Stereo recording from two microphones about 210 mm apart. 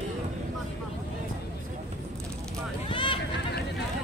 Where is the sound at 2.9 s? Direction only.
25° left (ahead or behind).